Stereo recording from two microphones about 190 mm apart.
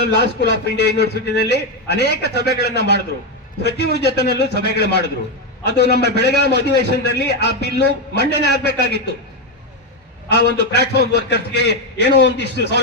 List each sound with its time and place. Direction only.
0.0 s a man's voice: 60° left (ahead or behind)
10.2 s a man's voice: 60° left (ahead or behind)